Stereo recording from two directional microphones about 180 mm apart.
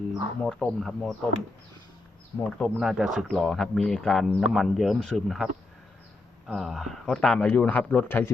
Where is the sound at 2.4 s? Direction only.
5° left (ahead or behind).